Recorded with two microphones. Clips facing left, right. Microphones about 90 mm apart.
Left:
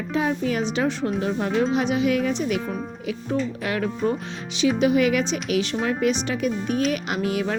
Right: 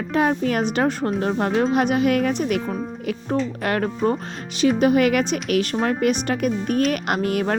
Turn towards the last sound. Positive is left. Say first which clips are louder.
# right 3 dB
turn(degrees=-50)  # may be behind; listen again after turning